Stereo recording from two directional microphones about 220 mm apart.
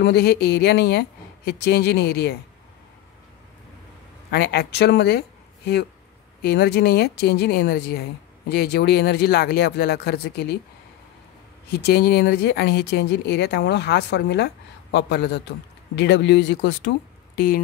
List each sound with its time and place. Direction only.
0.0 s speech: 45° left (ahead or behind)
4.3 s speech: 50° left (ahead or behind)
6.4 s speech: 45° left (ahead or behind)
11.7 s speech: 45° left (ahead or behind)